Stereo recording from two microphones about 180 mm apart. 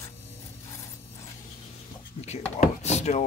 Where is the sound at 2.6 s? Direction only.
35° left (ahead or behind).